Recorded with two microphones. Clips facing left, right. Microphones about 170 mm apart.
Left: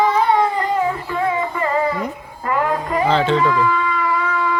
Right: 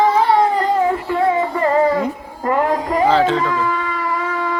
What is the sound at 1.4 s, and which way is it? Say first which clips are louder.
Music: right 4 dB; 40° right (ahead or behind).